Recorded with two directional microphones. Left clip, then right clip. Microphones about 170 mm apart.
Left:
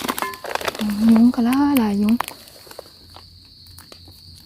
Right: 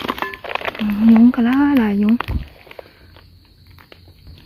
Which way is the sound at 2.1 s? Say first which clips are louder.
Right 2 dB; 20° left (ahead or behind).